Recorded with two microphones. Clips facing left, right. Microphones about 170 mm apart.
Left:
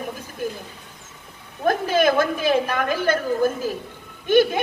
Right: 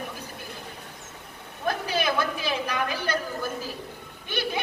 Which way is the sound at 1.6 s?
45° left (ahead or behind).